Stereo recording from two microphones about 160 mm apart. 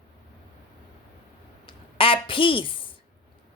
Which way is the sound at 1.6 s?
35° left (ahead or behind).